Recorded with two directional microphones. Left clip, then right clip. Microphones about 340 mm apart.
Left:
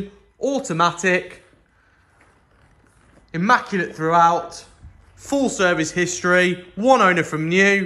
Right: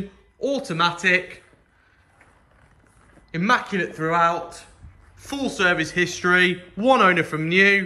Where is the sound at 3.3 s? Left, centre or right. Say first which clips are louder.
Left 3 dB; centre.